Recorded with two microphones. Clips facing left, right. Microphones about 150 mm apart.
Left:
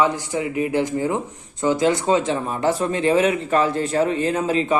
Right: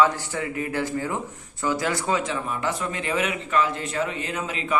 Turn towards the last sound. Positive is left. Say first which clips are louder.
# left 10 dB
turn(degrees=35)  # may be behind; listen again after turning